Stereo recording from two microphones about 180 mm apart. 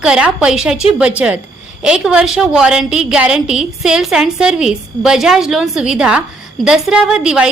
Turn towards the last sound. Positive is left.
turn(degrees=-5)  # may be behind; listen again after turning